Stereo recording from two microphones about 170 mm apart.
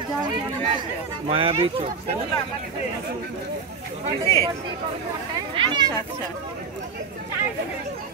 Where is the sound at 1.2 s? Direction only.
35° right (ahead or behind).